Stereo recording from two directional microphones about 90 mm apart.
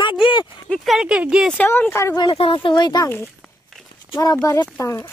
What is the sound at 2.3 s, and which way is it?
Speech, 75° left (ahead or behind).